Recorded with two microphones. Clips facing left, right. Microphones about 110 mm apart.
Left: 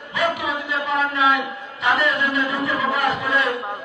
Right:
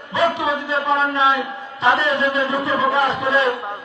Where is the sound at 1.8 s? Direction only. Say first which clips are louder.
Right 3 dB; 30° right (ahead or behind).